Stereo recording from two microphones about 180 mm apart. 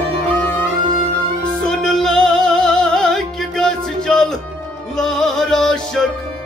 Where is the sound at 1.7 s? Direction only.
5° left (ahead or behind).